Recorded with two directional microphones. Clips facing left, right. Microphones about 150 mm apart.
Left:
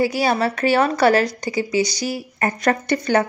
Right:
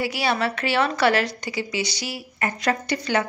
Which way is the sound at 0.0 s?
40° left (ahead or behind).